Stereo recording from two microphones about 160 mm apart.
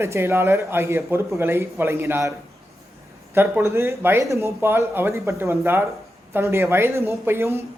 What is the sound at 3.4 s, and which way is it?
Speech, 15° right (ahead or behind).